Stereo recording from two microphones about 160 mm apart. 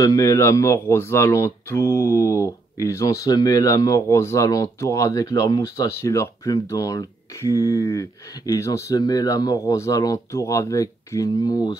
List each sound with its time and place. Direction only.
0.0 s speech: 20° left (ahead or behind)